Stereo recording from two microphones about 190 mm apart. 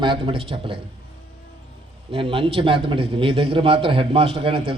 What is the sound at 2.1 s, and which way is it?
A man's voice, 30° right (ahead or behind).